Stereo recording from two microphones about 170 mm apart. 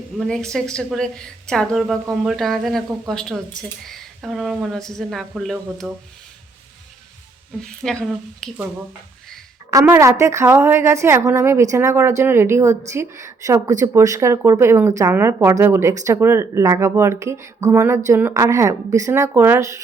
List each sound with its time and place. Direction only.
0.2 s a woman's voice: 5° left (ahead or behind)
7.6 s a woman's voice: 5° left (ahead or behind)
9.8 s a woman's voice: 15° right (ahead or behind)